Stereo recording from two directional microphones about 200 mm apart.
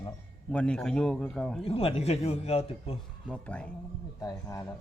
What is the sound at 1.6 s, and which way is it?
Speech, 30° left (ahead or behind).